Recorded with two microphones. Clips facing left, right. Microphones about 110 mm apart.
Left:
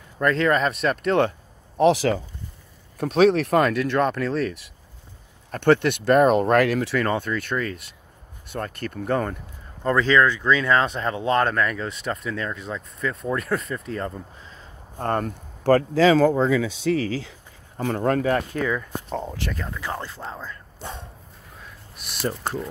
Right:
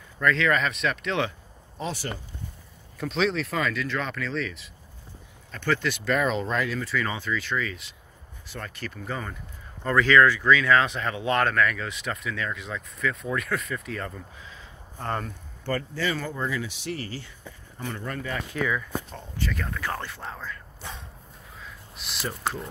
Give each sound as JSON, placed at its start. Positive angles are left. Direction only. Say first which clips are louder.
{"t": 0.2, "sound": "speech", "louder": "left 3 dB", "side_deg": 45}
{"t": 1.8, "sound": "speech", "louder": "left 15 dB", "side_deg": 85}
{"t": 3.0, "sound": "speech", "louder": "left 8 dB", "side_deg": 55}
{"t": 5.5, "sound": "speech", "louder": "left 9 dB", "side_deg": 60}
{"t": 9.8, "sound": "speech", "louder": "left 1 dB", "side_deg": 25}
{"t": 15.6, "sound": "speech", "louder": "left 12 dB", "side_deg": 90}
{"t": 18.5, "sound": "speech", "louder": "left 2 dB", "side_deg": 35}
{"t": 19.2, "sound": "speech", "louder": "left 2 dB", "side_deg": 80}
{"t": 19.6, "sound": "speech", "louder": "left 1 dB", "side_deg": 20}